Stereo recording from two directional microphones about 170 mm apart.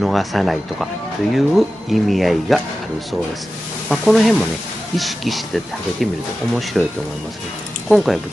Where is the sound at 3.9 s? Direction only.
Centre (ahead or behind).